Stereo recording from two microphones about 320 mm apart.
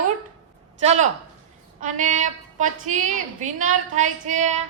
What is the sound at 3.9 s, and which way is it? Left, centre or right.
Female singing, right.